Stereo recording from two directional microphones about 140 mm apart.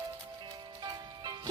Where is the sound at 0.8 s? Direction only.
30° right (ahead or behind).